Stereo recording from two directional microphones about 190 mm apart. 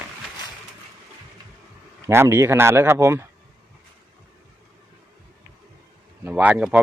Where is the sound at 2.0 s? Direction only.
15° right (ahead or behind).